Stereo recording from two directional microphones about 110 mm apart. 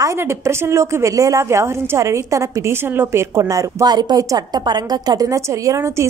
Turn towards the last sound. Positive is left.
turn(degrees=-25)  # may be behind; listen again after turning